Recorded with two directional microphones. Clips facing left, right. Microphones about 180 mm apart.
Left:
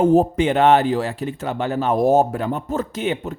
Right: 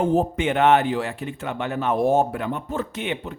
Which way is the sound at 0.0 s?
40° left (ahead or behind).